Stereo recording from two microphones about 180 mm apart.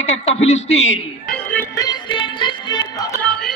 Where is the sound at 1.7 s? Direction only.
20° left (ahead or behind).